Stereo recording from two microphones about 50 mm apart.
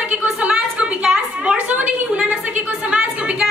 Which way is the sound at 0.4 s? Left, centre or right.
Right.